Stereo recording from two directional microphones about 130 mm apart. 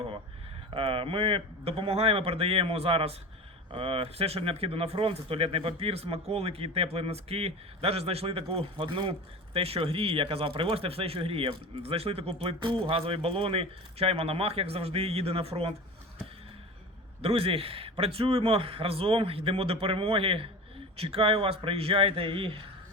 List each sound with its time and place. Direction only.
0.7 s speech: 45° right (ahead or behind)
17.2 s speech: 50° right (ahead or behind)